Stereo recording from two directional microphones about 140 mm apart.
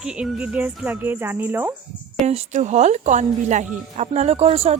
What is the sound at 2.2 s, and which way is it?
Speech, 55° right (ahead or behind).